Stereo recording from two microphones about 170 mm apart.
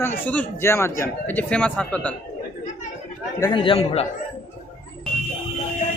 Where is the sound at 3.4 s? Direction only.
30° left (ahead or behind).